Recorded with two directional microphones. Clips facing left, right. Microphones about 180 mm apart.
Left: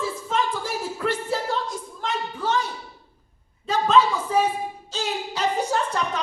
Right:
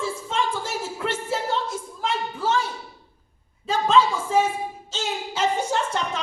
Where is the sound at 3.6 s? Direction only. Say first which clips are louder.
Even; 25° right (ahead or behind).